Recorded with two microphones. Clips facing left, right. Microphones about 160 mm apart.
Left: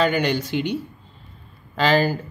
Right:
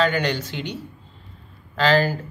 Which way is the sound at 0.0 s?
10° left (ahead or behind).